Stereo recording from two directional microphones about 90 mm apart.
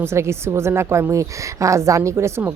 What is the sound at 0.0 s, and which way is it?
A woman's voice, 30° right (ahead or behind).